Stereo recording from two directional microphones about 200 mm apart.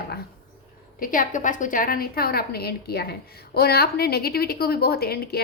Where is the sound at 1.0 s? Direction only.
45° left (ahead or behind).